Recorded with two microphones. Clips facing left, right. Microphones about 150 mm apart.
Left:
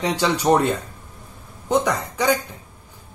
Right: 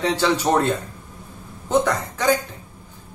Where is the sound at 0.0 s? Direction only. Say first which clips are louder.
Right 1 dB; 15° left (ahead or behind).